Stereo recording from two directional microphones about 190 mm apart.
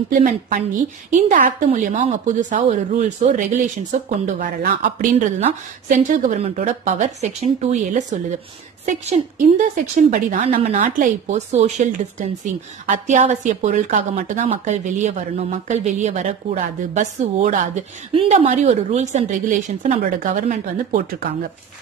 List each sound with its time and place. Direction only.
0.1 s speech: 45° right (ahead or behind)